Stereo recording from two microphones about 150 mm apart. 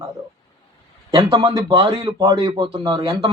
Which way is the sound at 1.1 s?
35° right (ahead or behind).